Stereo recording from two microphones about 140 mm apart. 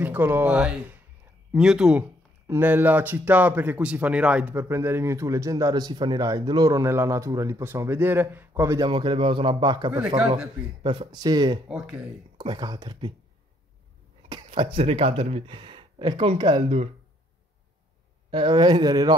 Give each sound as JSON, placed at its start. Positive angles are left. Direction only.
{"t": 0.0, "sound": "speech", "side_deg": -15}
{"t": 2.4, "sound": "speech", "side_deg": -15}
{"t": 9.9, "sound": "speech", "side_deg": -10}
{"t": 10.8, "sound": "speech", "side_deg": -35}
{"t": 11.7, "sound": "speech", "side_deg": -5}
{"t": 12.4, "sound": "speech", "side_deg": -30}
{"t": 14.5, "sound": "speech", "side_deg": -40}
{"t": 18.3, "sound": "speech", "side_deg": -35}